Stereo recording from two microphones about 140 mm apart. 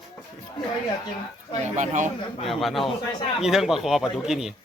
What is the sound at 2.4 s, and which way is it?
Speech, centre (ahead or behind).